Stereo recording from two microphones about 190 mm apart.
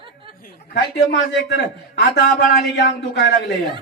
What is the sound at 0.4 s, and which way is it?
A man's voice, 60° left (ahead or behind).